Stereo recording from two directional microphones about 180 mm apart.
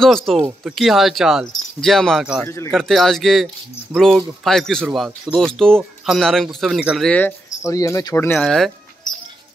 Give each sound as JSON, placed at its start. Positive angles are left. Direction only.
{"t": 0.0, "sound": "speech", "side_deg": 0}
{"t": 2.4, "sound": "speech", "side_deg": 15}
{"t": 2.7, "sound": "speech", "side_deg": 0}
{"t": 8.4, "sound": "speech", "side_deg": 0}